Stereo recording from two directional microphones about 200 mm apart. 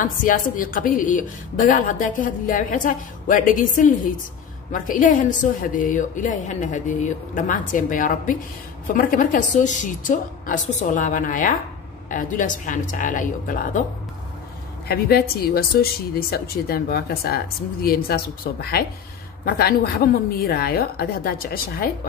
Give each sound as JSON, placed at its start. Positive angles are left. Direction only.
{"t": 0.0, "sound": "a woman's voice", "side_deg": 45}
{"t": 14.9, "sound": "speech", "side_deg": 50}
{"t": 20.4, "sound": "speech", "side_deg": 50}